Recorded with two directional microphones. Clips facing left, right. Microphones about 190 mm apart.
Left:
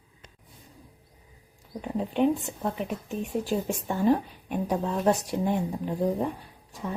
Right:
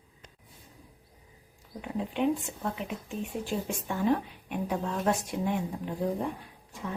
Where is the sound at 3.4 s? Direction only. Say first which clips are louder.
Left 4 dB; 35° left (ahead or behind).